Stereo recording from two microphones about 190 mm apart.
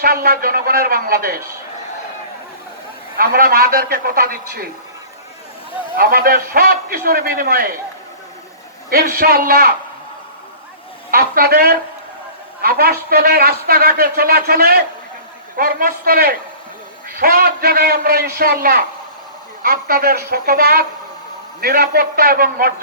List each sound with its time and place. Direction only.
0.0 s a man's voice: 50° right (ahead or behind)
3.2 s a man's voice: 50° right (ahead or behind)
6.0 s a man's voice: 50° right (ahead or behind)
8.9 s a man's voice: 50° right (ahead or behind)
11.1 s a woman's voice: 55° right (ahead or behind)